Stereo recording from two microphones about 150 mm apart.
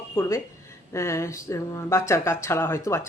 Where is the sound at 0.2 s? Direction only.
20° left (ahead or behind).